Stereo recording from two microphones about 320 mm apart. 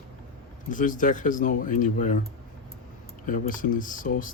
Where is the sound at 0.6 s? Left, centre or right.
Left.